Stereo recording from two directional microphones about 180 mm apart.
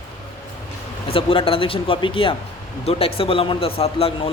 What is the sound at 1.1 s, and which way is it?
Speech, 30° left (ahead or behind).